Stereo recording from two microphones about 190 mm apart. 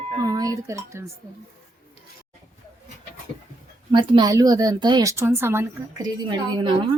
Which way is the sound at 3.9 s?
25° right (ahead or behind).